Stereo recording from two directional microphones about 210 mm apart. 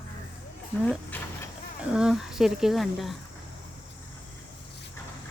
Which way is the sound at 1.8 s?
5° right (ahead or behind).